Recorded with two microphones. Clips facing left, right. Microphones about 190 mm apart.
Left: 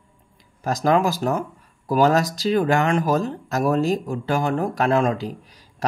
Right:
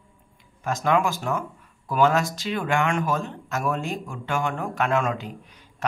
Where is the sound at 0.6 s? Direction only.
40° left (ahead or behind).